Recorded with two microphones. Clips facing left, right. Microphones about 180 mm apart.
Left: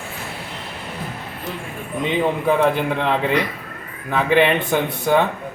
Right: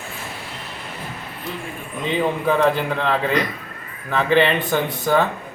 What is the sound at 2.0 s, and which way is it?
A man's voice, 15° left (ahead or behind).